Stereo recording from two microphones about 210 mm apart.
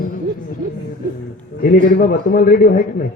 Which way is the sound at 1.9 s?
45° left (ahead or behind).